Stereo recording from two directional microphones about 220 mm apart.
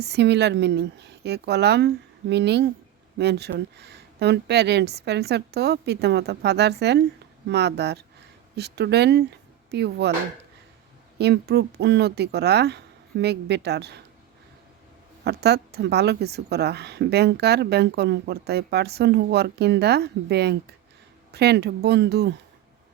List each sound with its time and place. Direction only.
0.0 s a woman's voice: 50° right (ahead or behind)
11.2 s a woman's voice: 50° right (ahead or behind)
15.2 s a woman's voice: 50° right (ahead or behind)